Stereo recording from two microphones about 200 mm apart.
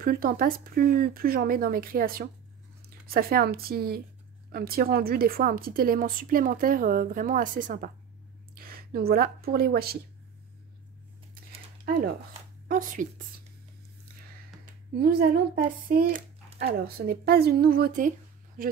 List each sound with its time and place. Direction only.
0.0 s speech: 45° right (ahead or behind)
12.6 s speech: 40° right (ahead or behind)
15.0 s speech: 50° right (ahead or behind)